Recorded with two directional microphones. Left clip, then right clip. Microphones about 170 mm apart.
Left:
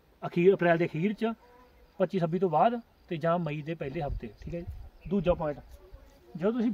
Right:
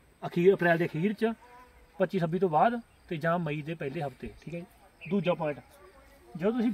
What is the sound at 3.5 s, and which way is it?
Speech, 30° left (ahead or behind).